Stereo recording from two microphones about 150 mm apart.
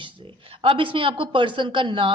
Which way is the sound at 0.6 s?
35° right (ahead or behind).